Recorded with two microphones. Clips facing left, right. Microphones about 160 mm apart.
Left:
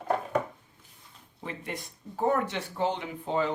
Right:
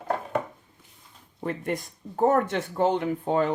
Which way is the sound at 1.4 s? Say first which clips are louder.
Right 8 dB; 50° right (ahead or behind).